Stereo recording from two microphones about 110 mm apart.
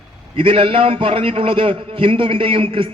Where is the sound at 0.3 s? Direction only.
55° right (ahead or behind).